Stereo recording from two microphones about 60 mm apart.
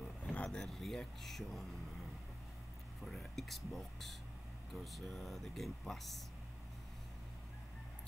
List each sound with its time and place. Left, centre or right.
0.2 s a sound: left
0.5 s speech: centre
3.0 s speech: centre